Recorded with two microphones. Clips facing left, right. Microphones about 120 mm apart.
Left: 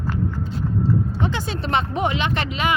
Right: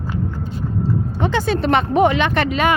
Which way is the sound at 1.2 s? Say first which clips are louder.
Right 7 dB; 65° right (ahead or behind).